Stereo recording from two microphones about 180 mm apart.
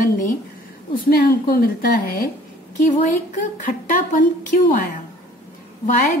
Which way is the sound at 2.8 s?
45° left (ahead or behind).